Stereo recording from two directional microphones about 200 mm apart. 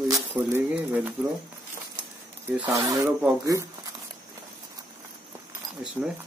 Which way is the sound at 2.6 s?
20° right (ahead or behind).